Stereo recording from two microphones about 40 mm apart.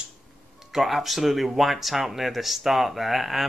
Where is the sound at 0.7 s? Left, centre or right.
Centre.